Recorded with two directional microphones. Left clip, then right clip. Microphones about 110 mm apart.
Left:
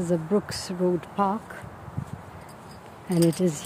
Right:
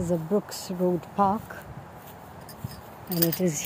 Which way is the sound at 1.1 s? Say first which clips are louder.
Right 2 dB; 10° left (ahead or behind).